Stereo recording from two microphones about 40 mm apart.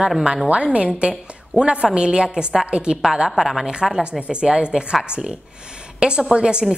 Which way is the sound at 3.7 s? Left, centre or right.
Centre.